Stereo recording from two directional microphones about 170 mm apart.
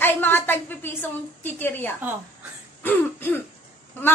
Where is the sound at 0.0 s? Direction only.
10° left (ahead or behind).